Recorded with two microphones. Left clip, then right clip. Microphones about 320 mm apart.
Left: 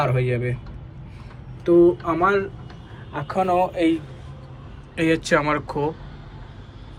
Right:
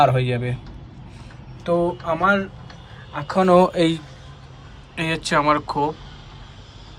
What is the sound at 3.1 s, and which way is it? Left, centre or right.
Speech, centre.